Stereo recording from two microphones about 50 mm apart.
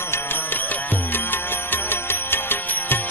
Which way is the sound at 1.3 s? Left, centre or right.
Left.